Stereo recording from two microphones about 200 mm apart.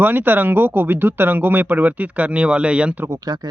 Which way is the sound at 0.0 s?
10° right (ahead or behind).